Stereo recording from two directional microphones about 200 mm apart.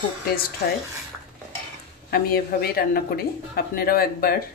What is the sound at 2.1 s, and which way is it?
Speech, 50° left (ahead or behind).